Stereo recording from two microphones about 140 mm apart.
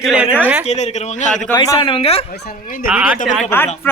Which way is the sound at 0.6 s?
55° left (ahead or behind).